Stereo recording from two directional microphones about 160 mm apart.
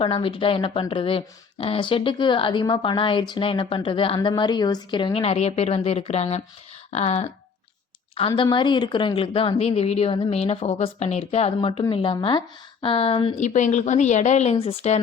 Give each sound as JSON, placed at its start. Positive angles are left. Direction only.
{"t": 0.0, "sound": "a woman's voice", "side_deg": 35}
{"t": 8.4, "sound": "speech", "side_deg": 30}
{"t": 13.3, "sound": "a woman's voice", "side_deg": 50}